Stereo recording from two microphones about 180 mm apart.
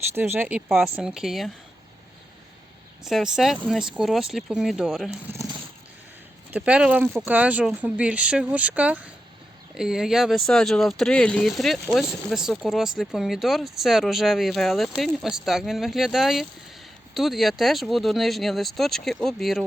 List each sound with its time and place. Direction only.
0.1 s speech: 10° right (ahead or behind)
3.0 s speech: centre (ahead or behind)
5.3 s a sound: 20° right (ahead or behind)
6.5 s speech: 5° right (ahead or behind)